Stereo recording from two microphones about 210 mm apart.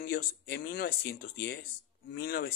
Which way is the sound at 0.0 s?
45° left (ahead or behind).